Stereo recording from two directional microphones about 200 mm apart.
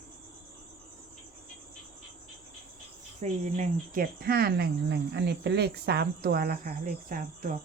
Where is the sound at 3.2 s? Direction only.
35° right (ahead or behind).